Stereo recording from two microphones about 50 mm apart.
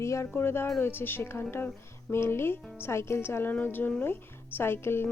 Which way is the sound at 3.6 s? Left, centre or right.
Left.